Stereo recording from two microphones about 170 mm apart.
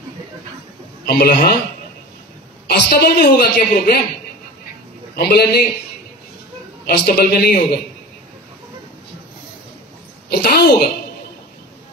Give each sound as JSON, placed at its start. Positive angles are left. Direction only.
{"t": 1.0, "sound": "a man's voice", "side_deg": 65}
{"t": 2.6, "sound": "a woman's voice", "side_deg": 70}
{"t": 5.1, "sound": "a man's voice", "side_deg": 70}
{"t": 6.9, "sound": "a woman's voice", "side_deg": 65}
{"t": 10.3, "sound": "a woman's voice", "side_deg": 65}